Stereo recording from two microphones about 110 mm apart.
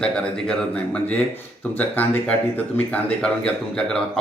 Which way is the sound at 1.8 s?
15° left (ahead or behind).